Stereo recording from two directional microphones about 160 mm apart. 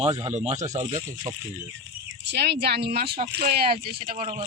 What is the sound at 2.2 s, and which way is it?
Speech, 90° right.